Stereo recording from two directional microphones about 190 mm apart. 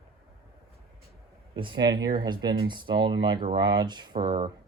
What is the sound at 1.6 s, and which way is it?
Speech, 25° right (ahead or behind).